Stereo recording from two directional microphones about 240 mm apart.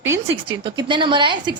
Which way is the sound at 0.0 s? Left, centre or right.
Centre.